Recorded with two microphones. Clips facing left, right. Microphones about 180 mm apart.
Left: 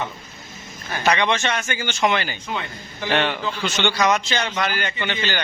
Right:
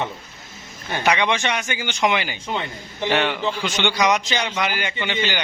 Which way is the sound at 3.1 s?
5° right (ahead or behind).